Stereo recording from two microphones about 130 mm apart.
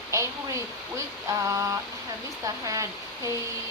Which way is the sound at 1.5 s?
25° right (ahead or behind).